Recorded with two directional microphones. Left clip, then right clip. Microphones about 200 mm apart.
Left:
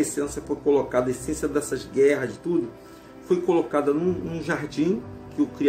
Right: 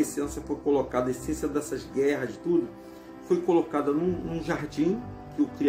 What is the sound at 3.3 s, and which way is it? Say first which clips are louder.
A man's voice: left 2 dB; 5° left (ahead or behind).